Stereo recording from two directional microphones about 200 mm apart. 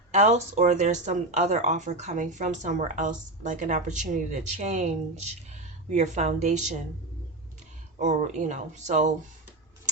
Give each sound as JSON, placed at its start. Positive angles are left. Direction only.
{"t": 0.1, "sound": "speech", "side_deg": -35}
{"t": 7.9, "sound": "speech", "side_deg": -35}